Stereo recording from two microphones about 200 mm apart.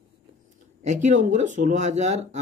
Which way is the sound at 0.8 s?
35° right (ahead or behind).